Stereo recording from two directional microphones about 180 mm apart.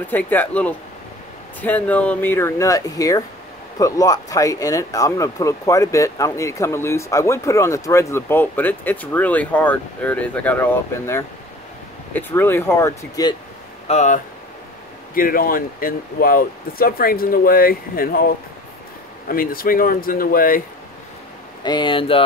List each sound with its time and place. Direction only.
0.1 s speech: 10° left (ahead or behind)
13.8 s speech: 40° left (ahead or behind)
15.1 s speech: 55° left (ahead or behind)
19.2 s speech: 50° left (ahead or behind)
21.6 s speech: 25° left (ahead or behind)